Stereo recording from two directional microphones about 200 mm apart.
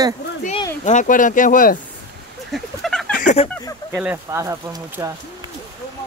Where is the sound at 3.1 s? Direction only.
35° left (ahead or behind).